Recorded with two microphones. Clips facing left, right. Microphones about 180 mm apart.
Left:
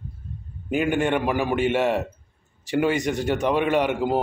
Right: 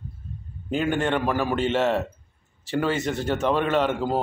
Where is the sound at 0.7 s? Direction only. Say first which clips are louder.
Left 2 dB; 10° left (ahead or behind).